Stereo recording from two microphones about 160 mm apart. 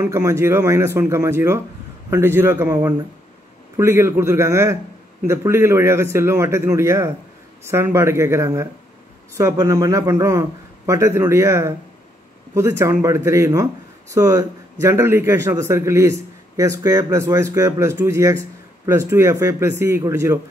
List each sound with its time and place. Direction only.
0.0 s a man's voice: 20° right (ahead or behind)